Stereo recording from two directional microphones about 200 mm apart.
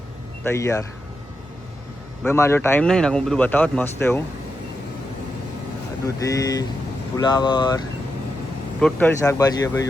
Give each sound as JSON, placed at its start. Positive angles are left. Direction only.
{"t": 0.4, "sound": "speech", "side_deg": 15}
{"t": 2.2, "sound": "speech", "side_deg": 15}
{"t": 6.1, "sound": "speech", "side_deg": 15}
{"t": 8.8, "sound": "speech", "side_deg": 10}